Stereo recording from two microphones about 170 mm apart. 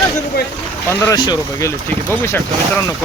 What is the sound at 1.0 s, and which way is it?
Speech, 25° left (ahead or behind).